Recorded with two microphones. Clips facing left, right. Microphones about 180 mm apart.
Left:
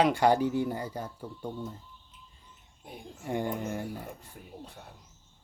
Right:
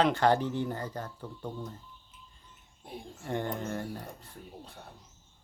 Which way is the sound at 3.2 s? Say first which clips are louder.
Left 2 dB; 10° left (ahead or behind).